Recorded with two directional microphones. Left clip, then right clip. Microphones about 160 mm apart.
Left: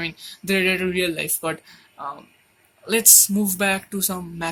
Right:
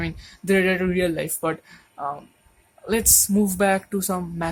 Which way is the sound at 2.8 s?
45° right (ahead or behind).